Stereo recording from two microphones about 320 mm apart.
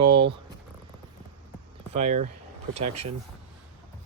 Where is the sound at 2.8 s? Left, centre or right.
Right.